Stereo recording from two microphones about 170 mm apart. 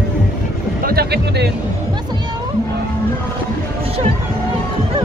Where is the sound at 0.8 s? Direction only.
65° right (ahead or behind).